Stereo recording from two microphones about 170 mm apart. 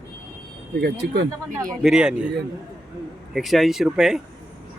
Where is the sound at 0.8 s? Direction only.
75° right (ahead or behind).